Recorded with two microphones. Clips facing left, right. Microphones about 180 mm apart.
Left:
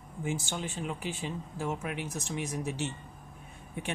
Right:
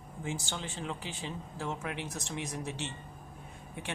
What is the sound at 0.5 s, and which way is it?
Speech, 15° left (ahead or behind).